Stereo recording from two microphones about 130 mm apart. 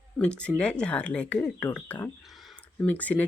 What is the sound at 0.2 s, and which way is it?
A woman's voice, 10° left (ahead or behind).